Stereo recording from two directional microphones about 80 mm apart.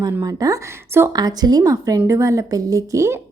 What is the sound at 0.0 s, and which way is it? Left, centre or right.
A woman's voice, right.